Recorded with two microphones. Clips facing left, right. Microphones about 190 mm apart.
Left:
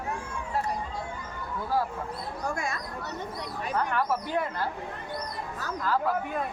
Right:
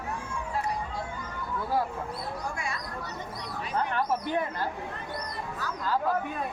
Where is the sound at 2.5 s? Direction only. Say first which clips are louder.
Left 3 dB; 45° left (ahead or behind).